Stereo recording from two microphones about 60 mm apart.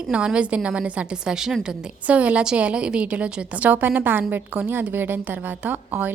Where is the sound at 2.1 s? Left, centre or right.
Right.